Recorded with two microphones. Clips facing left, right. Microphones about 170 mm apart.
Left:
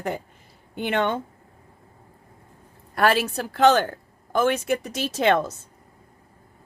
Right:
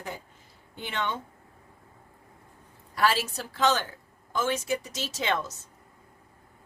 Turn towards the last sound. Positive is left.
turn(degrees=60)  # may be behind; listen again after turning